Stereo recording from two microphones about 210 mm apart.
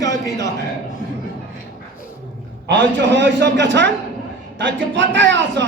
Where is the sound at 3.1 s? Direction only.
60° right (ahead or behind).